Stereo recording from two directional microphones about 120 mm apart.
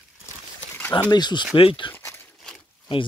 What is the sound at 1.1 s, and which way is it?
Speech, 40° left (ahead or behind).